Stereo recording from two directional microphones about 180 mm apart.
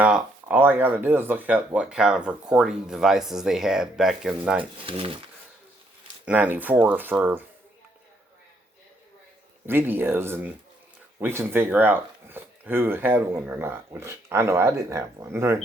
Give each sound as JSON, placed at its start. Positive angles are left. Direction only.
{"t": 0.0, "sound": "speech", "side_deg": -5}
{"t": 4.8, "sound": "speech", "side_deg": -30}
{"t": 6.2, "sound": "speech", "side_deg": -10}
{"t": 9.6, "sound": "speech", "side_deg": -10}